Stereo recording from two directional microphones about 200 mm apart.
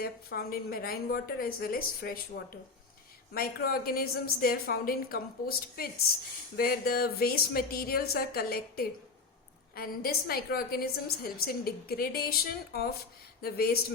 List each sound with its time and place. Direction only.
0.0 s a woman's voice: 50° left (ahead or behind)
3.3 s a woman's voice: 50° left (ahead or behind)